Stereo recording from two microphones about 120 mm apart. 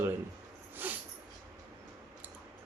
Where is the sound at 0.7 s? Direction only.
15° right (ahead or behind).